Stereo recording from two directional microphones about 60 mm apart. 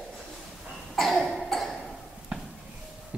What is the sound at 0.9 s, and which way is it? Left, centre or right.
Cough, centre.